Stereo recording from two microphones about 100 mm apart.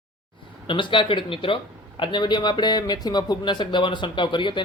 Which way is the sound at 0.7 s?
55° left (ahead or behind).